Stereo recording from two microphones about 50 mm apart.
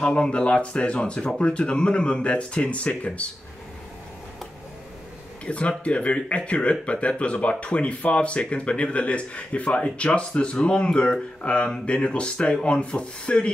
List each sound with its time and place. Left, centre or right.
0.0 s speech: left
5.4 s speech: left